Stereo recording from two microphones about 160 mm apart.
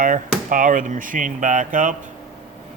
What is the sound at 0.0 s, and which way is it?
Speech, 55° right (ahead or behind).